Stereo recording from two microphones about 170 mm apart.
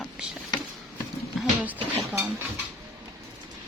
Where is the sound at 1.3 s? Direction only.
10° right (ahead or behind).